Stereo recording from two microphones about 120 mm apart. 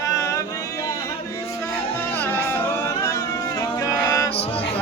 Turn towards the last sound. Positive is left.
turn(degrees=25)  # may be behind; listen again after turning